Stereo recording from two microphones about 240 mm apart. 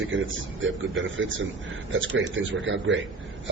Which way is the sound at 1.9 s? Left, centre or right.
Right.